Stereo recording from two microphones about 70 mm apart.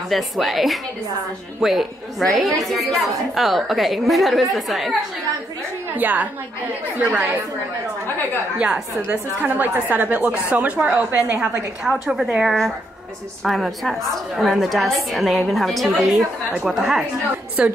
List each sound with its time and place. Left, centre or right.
0.1 s a woman's voice: centre
5.9 s a woman's voice: right
9.1 s a woman's voice: right
11.1 s a woman's voice: right
11.8 s a woman's voice: centre